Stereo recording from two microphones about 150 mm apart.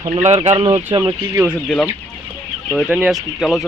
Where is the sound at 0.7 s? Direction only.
25° right (ahead or behind).